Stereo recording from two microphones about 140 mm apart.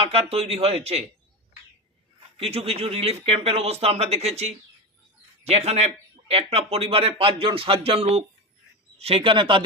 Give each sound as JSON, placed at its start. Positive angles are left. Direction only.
{"t": 0.0, "sound": "speech", "side_deg": -45}
{"t": 2.4, "sound": "speech", "side_deg": -45}